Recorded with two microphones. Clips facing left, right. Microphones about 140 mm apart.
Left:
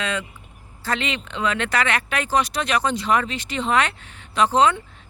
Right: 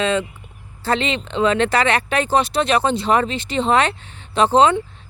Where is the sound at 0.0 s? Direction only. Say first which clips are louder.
Right 7 dB; 25° right (ahead or behind).